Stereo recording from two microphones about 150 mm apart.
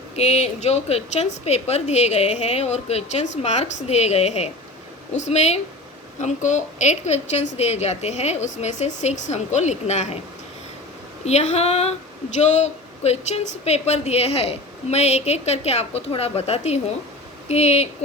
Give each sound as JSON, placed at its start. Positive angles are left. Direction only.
{"t": 0.2, "sound": "a woman's voice", "side_deg": 45}
{"t": 11.3, "sound": "a woman's voice", "side_deg": 45}